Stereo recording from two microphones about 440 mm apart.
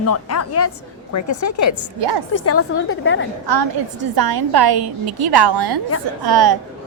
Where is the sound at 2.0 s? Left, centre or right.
Right.